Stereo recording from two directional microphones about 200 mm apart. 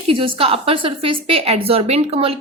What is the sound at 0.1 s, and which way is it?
A woman's voice, 25° right (ahead or behind).